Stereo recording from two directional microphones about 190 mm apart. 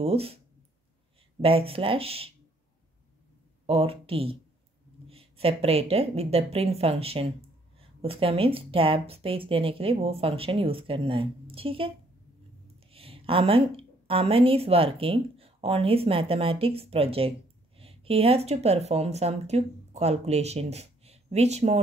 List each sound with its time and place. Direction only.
0.0 s speech: 30° right (ahead or behind)
1.4 s speech: 30° right (ahead or behind)
3.6 s speech: 30° right (ahead or behind)
12.9 s a woman's voice: 30° right (ahead or behind)